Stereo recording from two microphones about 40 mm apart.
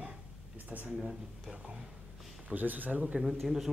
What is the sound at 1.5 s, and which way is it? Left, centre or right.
Speech, right.